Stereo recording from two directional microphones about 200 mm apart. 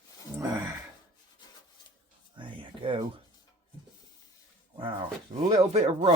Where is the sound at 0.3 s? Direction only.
20° right (ahead or behind).